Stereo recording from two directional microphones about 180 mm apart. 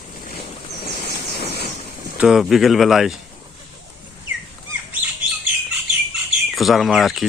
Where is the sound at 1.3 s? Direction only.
60° left (ahead or behind).